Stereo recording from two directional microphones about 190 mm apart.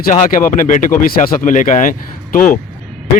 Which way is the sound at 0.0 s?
45° left (ahead or behind).